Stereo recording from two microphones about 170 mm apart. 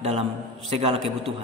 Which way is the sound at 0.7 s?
35° right (ahead or behind).